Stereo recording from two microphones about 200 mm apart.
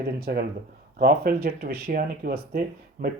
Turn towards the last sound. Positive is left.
turn(degrees=-45)  # may be behind; listen again after turning